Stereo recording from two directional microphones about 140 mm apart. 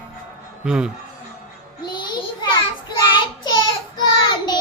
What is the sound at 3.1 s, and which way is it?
Child singing, 35° left (ahead or behind).